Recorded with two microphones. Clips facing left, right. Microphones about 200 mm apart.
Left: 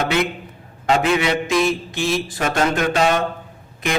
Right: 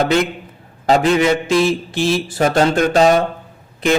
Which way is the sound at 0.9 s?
35° right (ahead or behind).